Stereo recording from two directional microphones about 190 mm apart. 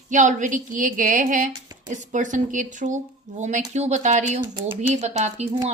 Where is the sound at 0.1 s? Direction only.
40° right (ahead or behind).